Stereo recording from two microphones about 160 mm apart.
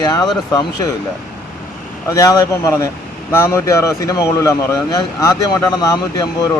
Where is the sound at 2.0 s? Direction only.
20° left (ahead or behind).